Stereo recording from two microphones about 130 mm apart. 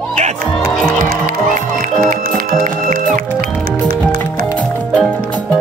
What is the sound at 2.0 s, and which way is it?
Music, 90° right.